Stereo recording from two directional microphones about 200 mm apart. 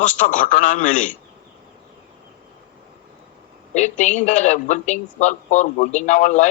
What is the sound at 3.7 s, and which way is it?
A man's voice, 35° left (ahead or behind).